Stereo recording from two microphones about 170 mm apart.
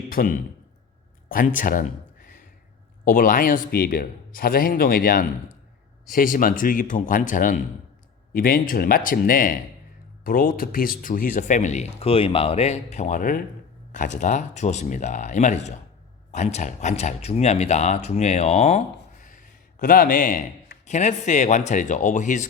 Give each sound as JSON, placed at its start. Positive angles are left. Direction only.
{"t": 0.1, "sound": "a man's voice", "side_deg": 55}
{"t": 19.8, "sound": "a man's voice", "side_deg": 55}
{"t": 20.8, "sound": "speech", "side_deg": 45}